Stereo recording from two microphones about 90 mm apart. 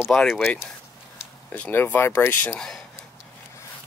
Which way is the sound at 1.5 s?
20° left (ahead or behind).